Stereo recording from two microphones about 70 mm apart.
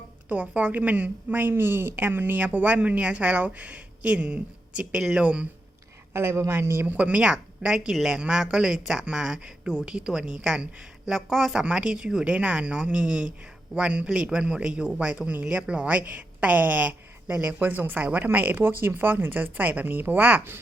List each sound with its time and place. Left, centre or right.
0.3 s a woman's voice: right
6.1 s a man's voice: right
6.8 s a woman's voice: centre